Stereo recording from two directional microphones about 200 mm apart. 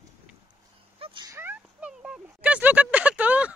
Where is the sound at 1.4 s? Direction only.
10° right (ahead or behind).